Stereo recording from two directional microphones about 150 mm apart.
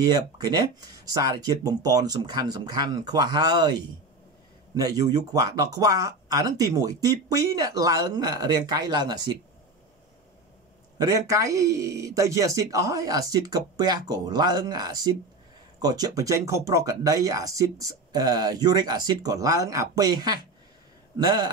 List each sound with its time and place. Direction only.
0.0 s speech: 25° right (ahead or behind)
11.0 s speech: 25° right (ahead or behind)